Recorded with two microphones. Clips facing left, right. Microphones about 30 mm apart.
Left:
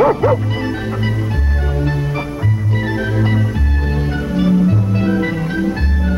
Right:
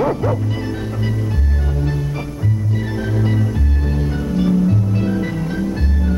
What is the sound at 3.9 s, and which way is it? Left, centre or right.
Music, left.